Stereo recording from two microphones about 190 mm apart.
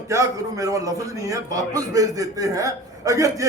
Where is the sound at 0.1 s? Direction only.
15° right (ahead or behind).